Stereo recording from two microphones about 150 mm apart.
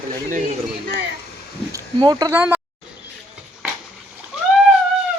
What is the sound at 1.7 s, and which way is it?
Speech, 25° right (ahead or behind).